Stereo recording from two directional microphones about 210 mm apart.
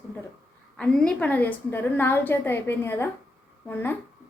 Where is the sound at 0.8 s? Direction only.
5° left (ahead or behind).